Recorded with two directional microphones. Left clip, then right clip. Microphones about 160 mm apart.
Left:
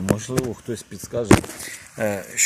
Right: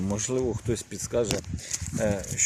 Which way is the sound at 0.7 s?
30° right (ahead or behind).